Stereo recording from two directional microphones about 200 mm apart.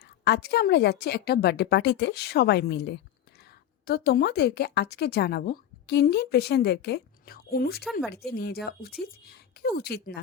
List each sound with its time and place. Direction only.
0.0 s a woman's voice: 55° left (ahead or behind)